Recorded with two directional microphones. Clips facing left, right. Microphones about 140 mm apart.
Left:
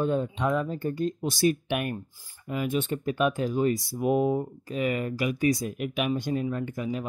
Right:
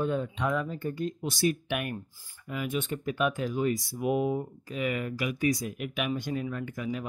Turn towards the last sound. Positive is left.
turn(degrees=30)  # may be behind; listen again after turning